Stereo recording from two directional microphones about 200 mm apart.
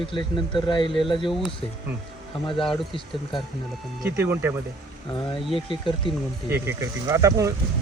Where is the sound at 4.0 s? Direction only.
10° right (ahead or behind).